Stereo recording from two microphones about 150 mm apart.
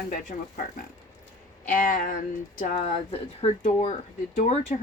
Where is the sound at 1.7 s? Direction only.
60° left (ahead or behind).